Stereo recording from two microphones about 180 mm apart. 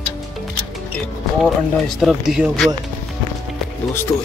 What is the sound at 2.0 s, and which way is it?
Speech, centre (ahead or behind).